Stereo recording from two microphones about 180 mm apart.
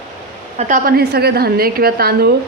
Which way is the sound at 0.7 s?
55° right (ahead or behind).